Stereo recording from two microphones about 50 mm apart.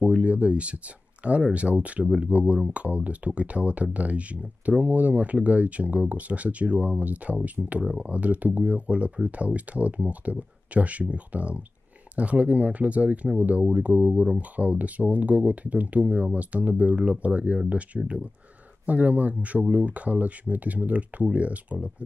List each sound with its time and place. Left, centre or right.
0.0 s speech: right